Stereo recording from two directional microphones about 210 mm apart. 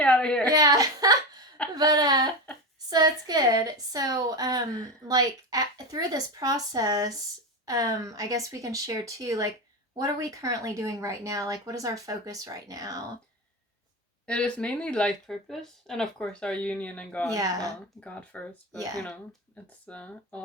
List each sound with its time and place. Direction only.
0.0 s a woman's voice: 5° left (ahead or behind)
0.4 s a woman's voice: 15° right (ahead or behind)
14.3 s speech: 5° left (ahead or behind)
17.3 s a woman's voice: 15° right (ahead or behind)
18.0 s speech: 5° left (ahead or behind)
19.9 s speech: 5° left (ahead or behind)